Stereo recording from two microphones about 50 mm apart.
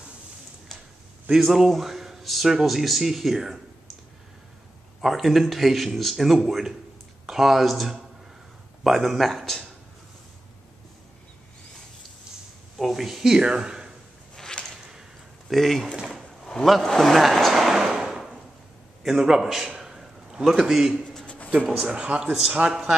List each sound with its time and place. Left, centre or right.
1.3 s a man's voice: centre
5.0 s a man's voice: centre
12.7 s a man's voice: centre
14.3 s a sound: centre
15.5 s a man's voice: centre
16.4 s a sound: centre
20.4 s a man's voice: centre
22.2 s a man's voice: centre